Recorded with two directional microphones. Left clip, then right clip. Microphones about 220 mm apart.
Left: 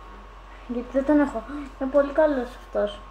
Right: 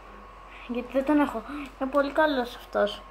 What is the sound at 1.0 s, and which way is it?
Speech, 15° right (ahead or behind).